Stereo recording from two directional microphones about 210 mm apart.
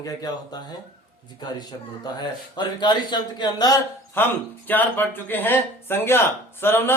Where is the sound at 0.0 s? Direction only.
15° left (ahead or behind).